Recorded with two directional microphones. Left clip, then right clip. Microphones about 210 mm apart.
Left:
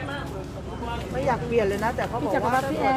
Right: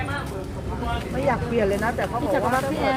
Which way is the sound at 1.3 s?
45° left (ahead or behind).